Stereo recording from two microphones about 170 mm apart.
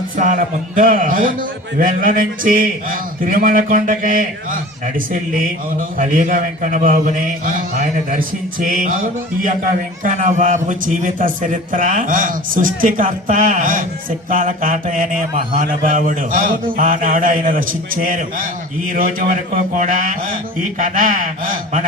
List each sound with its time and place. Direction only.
0.2 s a man's voice: 50° right (ahead or behind)